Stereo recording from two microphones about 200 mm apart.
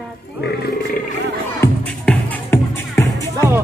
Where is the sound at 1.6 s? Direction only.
10° left (ahead or behind).